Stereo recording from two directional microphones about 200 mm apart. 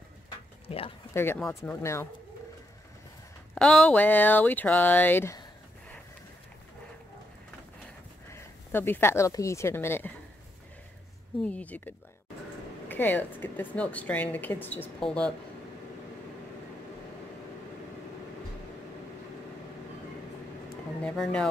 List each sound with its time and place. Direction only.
0.7 s speech: 30° left (ahead or behind)
1.1 s speech: 10° left (ahead or behind)
3.5 s speech: 5° left (ahead or behind)
8.3 s speech: 10° left (ahead or behind)
11.4 s speech: 5° left (ahead or behind)
21.0 s speech: 5° left (ahead or behind)